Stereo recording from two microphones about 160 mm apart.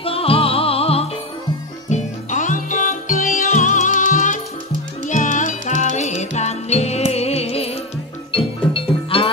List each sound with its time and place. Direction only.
0.0 s music: 35° left (ahead or behind)
1.9 s music: 50° left (ahead or behind)